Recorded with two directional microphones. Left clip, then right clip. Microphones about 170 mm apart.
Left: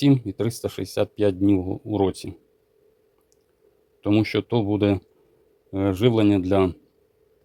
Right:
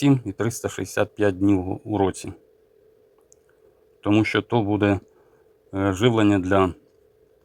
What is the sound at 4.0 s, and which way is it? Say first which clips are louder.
Speech: right 1 dB; 35° left (ahead or behind).